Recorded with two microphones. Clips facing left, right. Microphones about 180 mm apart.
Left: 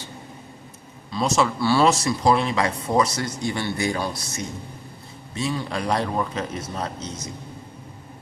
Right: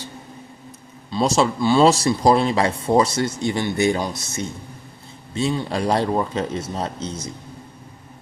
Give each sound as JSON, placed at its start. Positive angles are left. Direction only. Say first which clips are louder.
{"t": 1.1, "sound": "a man's voice", "louder": "right 3 dB", "side_deg": -30}
{"t": 1.5, "sound": "speech", "louder": "right 3 dB", "side_deg": -20}
{"t": 1.8, "sound": "speech", "louder": "right 5 dB", "side_deg": -30}